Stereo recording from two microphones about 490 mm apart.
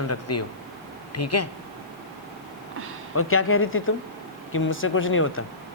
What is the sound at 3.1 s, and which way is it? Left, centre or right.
Speech, left.